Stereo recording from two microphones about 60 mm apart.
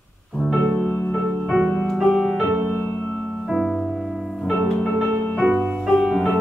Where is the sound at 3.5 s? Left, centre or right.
Centre.